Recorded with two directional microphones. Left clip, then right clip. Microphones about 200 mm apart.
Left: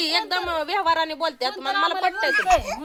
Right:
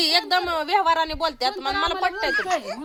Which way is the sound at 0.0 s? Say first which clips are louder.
Right 3 dB; 35° right (ahead or behind).